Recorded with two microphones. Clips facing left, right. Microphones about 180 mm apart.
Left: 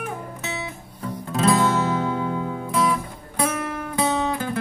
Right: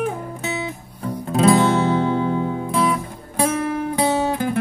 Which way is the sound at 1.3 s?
30° right (ahead or behind).